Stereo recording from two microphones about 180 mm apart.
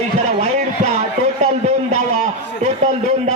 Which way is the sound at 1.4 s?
35° right (ahead or behind).